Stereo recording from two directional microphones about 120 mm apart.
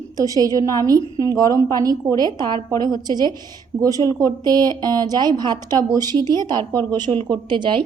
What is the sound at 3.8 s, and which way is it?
A woman's voice, 30° right (ahead or behind).